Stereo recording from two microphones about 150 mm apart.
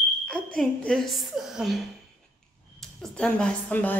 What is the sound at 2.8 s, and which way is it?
A woman's voice, 5° left (ahead or behind).